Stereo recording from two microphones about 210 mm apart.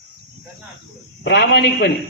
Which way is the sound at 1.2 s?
50° left (ahead or behind).